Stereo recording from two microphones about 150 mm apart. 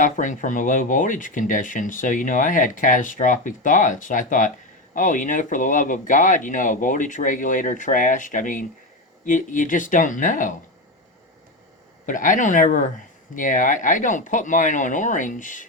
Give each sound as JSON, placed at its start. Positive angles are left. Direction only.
{"t": 0.0, "sound": "speech", "side_deg": 60}
{"t": 12.0, "sound": "speech", "side_deg": 60}